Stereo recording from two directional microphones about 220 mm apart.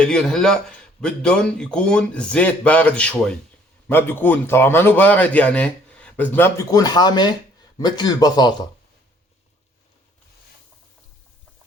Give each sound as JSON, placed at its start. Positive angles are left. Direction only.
{"t": 0.0, "sound": "a man's voice", "side_deg": 5}